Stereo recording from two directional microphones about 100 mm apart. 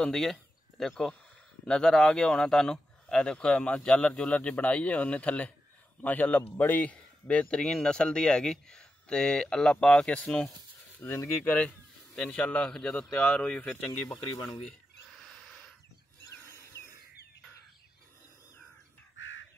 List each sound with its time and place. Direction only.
0.0 s a man's voice: 5° left (ahead or behind)
11.0 s a man's voice: 20° left (ahead or behind)
14.3 s speech: 55° left (ahead or behind)
14.7 s a sound: 5° left (ahead or behind)